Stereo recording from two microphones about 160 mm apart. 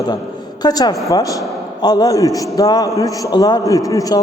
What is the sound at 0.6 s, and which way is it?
A man's voice, 25° left (ahead or behind).